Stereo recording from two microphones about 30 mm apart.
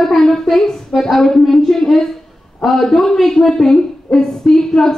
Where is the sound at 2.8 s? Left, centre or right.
Centre.